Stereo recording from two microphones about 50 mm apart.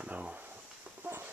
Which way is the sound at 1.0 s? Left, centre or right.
Right.